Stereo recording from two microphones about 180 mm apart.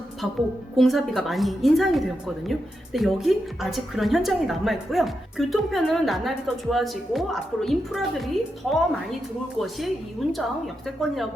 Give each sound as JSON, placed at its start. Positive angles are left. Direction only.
{"t": 0.8, "sound": "a woman's voice", "side_deg": 0}